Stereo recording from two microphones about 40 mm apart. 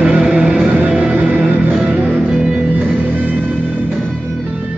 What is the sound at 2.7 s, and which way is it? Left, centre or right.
Music, right.